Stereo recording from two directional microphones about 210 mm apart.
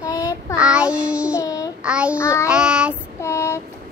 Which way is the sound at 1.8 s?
5° right (ahead or behind).